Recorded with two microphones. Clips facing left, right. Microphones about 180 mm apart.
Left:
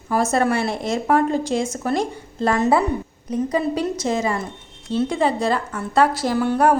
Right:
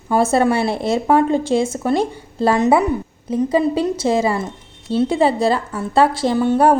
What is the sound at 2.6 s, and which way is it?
A woman's voice, 20° right (ahead or behind).